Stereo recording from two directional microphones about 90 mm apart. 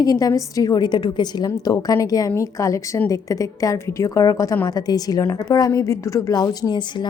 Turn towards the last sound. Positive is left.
turn(degrees=45)  # may be behind; listen again after turning